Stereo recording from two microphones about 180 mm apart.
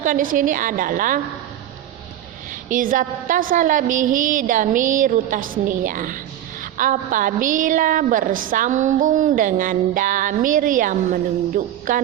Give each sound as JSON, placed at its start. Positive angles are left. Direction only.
{"t": 0.0, "sound": "a woman's voice", "side_deg": -50}
{"t": 2.6, "sound": "a woman's voice", "side_deg": -50}